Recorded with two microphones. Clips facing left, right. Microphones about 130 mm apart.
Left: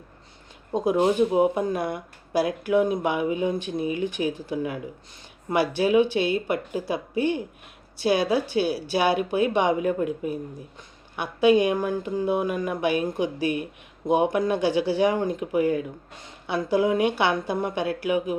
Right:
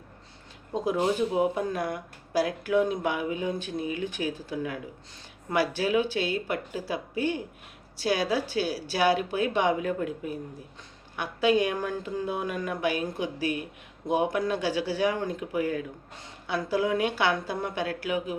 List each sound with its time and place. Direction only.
0.7 s a woman's voice: 20° left (ahead or behind)
11.2 s a woman's voice: 15° left (ahead or behind)